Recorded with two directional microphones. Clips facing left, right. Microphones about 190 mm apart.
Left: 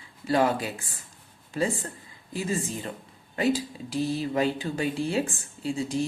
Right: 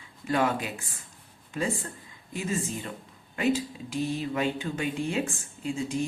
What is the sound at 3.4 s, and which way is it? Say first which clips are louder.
Speech: left 1 dB; 35° left (ahead or behind).